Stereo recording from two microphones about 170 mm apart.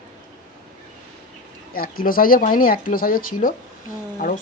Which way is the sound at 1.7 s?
60° left (ahead or behind).